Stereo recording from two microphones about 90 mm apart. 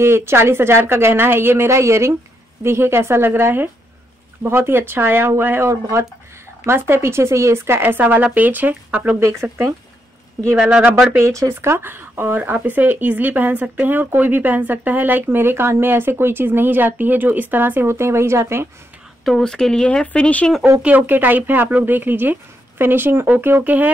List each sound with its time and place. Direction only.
0.0 s speech: 30° right (ahead or behind)
9.4 s speech: 30° right (ahead or behind)
11.1 s speech: 30° right (ahead or behind)
19.2 s speech: 5° left (ahead or behind)
20.8 s speech: 20° right (ahead or behind)